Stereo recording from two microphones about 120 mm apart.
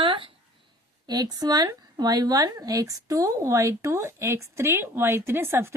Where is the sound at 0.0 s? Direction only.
45° right (ahead or behind).